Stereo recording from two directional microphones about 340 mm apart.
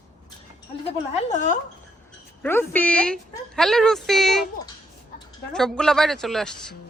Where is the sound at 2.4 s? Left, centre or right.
Centre.